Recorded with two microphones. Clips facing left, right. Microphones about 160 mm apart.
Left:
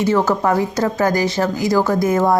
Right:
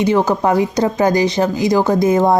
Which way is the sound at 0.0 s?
15° right (ahead or behind).